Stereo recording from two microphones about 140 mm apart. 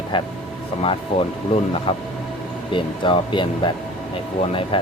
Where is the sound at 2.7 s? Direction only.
35° left (ahead or behind).